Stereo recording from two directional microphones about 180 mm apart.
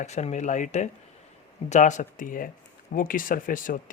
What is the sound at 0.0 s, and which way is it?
Speech, 40° left (ahead or behind).